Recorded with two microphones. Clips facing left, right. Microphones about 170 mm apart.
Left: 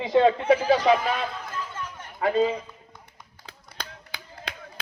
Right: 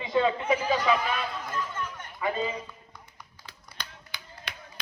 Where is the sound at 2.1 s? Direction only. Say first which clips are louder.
Left 7 dB; 65° left (ahead or behind).